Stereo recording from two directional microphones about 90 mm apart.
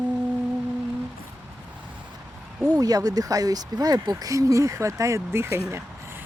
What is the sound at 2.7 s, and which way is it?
Speech, 45° right (ahead or behind).